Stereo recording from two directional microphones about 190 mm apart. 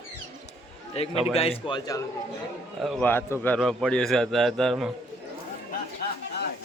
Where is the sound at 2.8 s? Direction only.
Centre (ahead or behind).